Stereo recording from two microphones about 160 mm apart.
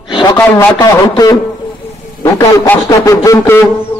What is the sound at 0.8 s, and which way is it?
A man's voice, 25° left (ahead or behind).